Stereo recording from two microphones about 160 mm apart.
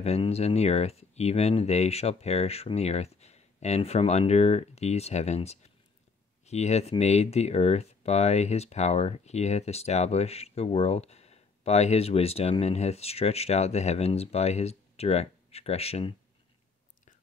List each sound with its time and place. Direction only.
0.0 s speech: 40° left (ahead or behind)